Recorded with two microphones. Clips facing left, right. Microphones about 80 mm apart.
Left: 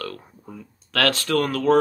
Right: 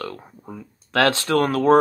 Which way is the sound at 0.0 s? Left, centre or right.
Right.